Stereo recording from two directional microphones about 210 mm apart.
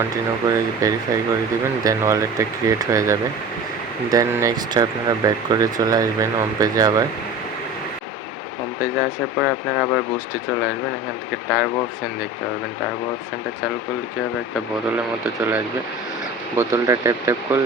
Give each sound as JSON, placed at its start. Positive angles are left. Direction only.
{"t": 0.0, "sound": "speech", "side_deg": -15}
{"t": 9.0, "sound": "speech", "side_deg": -5}
{"t": 11.4, "sound": "speech", "side_deg": -5}
{"t": 15.4, "sound": "speech", "side_deg": -10}